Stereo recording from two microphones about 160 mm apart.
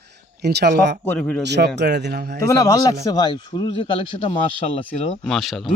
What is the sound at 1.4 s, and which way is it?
Speech, 90° right.